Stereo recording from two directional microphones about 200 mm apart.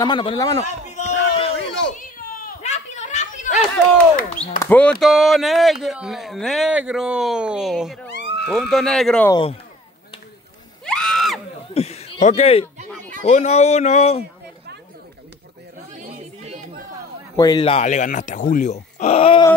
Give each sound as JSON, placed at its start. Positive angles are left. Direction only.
{"t": 0.0, "sound": "speech", "side_deg": 25}
{"t": 1.9, "sound": "children playing", "side_deg": 40}
{"t": 3.5, "sound": "speech", "side_deg": 5}
{"t": 8.1, "sound": "goat", "side_deg": 55}
{"t": 8.5, "sound": "speech", "side_deg": 0}
{"t": 9.3, "sound": "speech", "side_deg": 25}
{"t": 10.9, "sound": "a sound", "side_deg": 5}
{"t": 11.7, "sound": "a sound", "side_deg": 30}
{"t": 13.2, "sound": "speech", "side_deg": 35}
{"t": 16.0, "sound": "a sound", "side_deg": -35}
{"t": 17.4, "sound": "speech", "side_deg": 20}